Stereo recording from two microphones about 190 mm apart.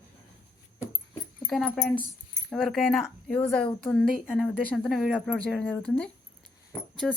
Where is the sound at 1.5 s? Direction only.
Centre (ahead or behind).